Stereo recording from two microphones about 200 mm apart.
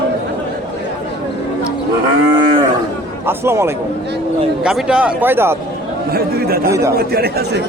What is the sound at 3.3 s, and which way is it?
A man's voice, 10° right (ahead or behind).